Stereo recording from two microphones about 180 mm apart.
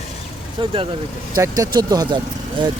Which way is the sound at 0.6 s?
30° right (ahead or behind).